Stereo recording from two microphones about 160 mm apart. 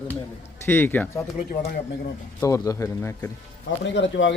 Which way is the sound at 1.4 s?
60° left (ahead or behind).